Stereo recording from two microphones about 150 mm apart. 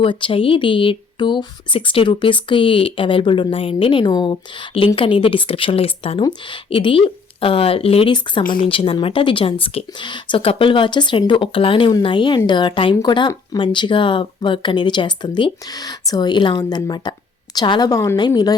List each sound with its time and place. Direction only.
0.0 s speech: 35° left (ahead or behind)